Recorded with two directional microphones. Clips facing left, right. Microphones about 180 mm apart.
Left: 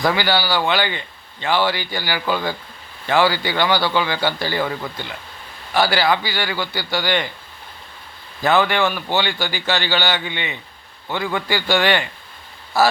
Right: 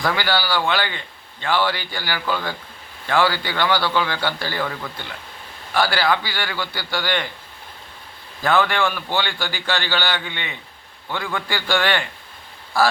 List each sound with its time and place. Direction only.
0.0 s a man's voice: 10° left (ahead or behind)
8.4 s a man's voice: 5° left (ahead or behind)